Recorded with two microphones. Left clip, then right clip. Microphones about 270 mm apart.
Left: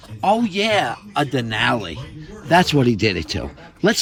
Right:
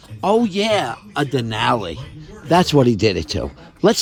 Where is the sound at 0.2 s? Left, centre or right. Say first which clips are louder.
Right 1 dB; centre.